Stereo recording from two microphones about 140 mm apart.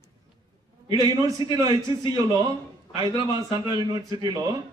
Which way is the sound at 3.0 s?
25° right (ahead or behind).